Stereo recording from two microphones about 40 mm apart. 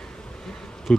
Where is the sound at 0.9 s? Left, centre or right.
Centre.